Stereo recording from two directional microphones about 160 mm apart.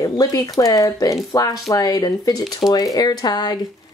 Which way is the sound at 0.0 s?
20° left (ahead or behind).